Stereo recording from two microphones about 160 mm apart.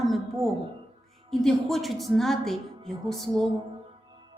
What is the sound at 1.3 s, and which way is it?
A woman's voice, centre (ahead or behind).